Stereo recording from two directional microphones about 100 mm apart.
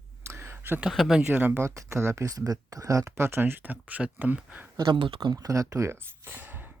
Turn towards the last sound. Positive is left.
turn(degrees=-20)  # may be behind; listen again after turning